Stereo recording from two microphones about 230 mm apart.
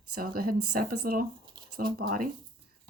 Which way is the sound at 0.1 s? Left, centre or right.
Right.